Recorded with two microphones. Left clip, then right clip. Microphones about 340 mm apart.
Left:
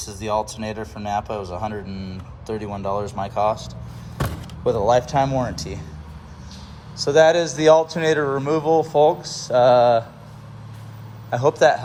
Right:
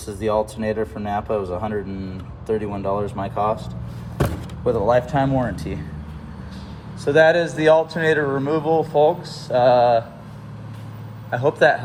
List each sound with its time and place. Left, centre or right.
0.0 s speech: centre
4.2 s slam: centre
5.4 s speech: centre
7.0 s speech: centre
11.3 s speech: centre